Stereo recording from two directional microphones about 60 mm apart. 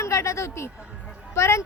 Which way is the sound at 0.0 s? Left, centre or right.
Left.